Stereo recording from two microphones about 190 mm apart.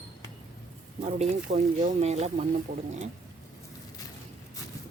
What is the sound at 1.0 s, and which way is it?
Speech, 35° right (ahead or behind).